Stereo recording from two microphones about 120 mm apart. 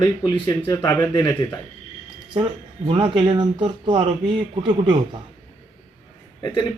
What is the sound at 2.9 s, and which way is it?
Speech, 45° right (ahead or behind).